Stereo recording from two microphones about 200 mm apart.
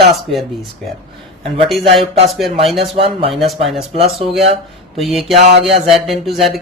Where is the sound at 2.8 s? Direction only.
30° right (ahead or behind).